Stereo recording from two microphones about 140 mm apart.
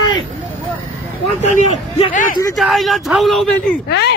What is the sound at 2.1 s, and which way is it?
Speech, 75° left (ahead or behind).